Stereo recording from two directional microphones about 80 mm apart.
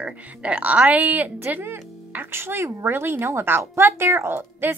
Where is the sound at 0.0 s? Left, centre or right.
Centre.